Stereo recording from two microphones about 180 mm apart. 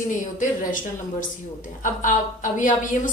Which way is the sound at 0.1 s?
45° left (ahead or behind).